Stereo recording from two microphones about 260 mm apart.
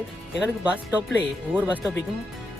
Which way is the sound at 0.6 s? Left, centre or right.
Centre.